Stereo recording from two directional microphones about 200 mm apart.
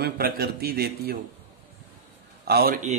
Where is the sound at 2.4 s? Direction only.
50° right (ahead or behind).